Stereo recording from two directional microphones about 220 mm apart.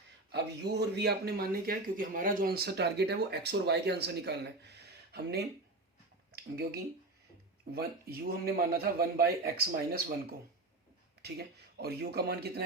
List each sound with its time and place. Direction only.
0.3 s speech: 50° right (ahead or behind)
6.3 s speech: 45° right (ahead or behind)